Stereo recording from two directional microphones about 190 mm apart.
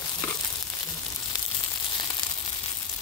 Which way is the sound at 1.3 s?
20° left (ahead or behind).